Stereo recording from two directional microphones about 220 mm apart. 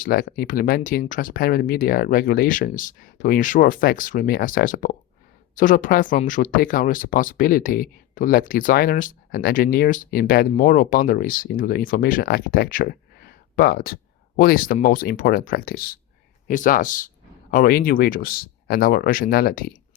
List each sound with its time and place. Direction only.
0.0 s speech: 40° left (ahead or behind)